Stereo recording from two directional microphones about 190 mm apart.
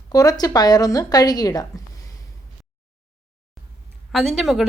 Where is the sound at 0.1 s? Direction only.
20° left (ahead or behind).